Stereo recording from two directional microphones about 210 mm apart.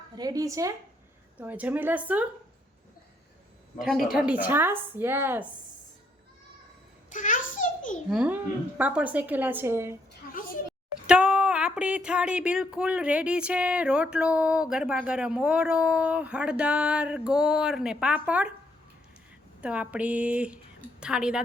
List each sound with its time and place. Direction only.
0.2 s speech: 15° right (ahead or behind)
3.8 s speech: centre (ahead or behind)
7.1 s a sound: 40° left (ahead or behind)
8.1 s a child's voice: 5° right (ahead or behind)
11.0 s speech: 5° right (ahead or behind)
19.6 s speech: 5° right (ahead or behind)